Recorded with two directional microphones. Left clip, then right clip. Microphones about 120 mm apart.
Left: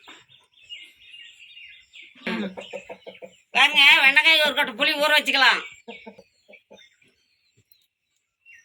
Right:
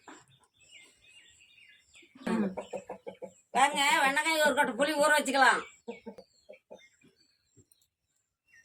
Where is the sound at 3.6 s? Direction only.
35° right (ahead or behind).